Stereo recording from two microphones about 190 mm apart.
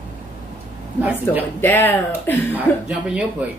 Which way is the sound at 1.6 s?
10° left (ahead or behind).